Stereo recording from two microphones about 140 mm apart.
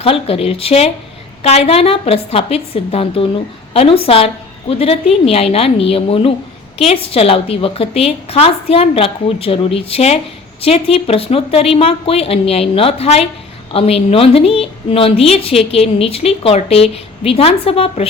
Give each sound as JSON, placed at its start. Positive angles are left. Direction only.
{"t": 0.0, "sound": "a woman's voice", "side_deg": 45}